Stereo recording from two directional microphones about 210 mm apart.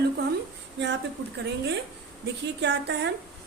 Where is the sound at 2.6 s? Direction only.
55° right (ahead or behind).